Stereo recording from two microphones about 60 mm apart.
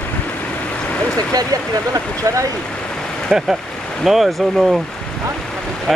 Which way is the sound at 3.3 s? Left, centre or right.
Centre.